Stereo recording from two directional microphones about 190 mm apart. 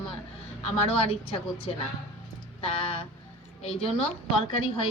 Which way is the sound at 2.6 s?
30° left (ahead or behind).